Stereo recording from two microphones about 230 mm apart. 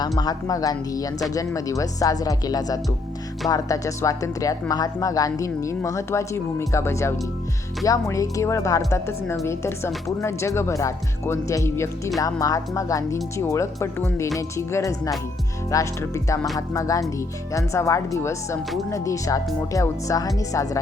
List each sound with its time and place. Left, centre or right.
0.2 s speech: centre